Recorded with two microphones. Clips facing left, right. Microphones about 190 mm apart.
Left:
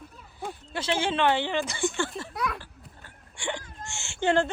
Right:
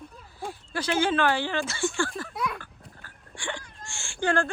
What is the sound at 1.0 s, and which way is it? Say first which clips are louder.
Speech: right 1 dB; 25° left (ahead or behind).